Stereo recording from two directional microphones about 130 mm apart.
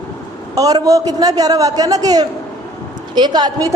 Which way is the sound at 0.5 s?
30° right (ahead or behind).